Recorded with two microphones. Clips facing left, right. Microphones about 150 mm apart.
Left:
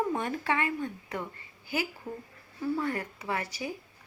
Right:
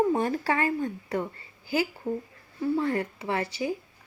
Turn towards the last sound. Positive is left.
turn(degrees=-30)  # may be behind; listen again after turning